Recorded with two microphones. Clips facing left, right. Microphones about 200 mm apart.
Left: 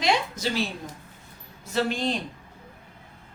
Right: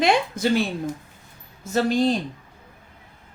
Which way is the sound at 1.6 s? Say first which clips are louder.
Right 6 dB; 45° right (ahead or behind).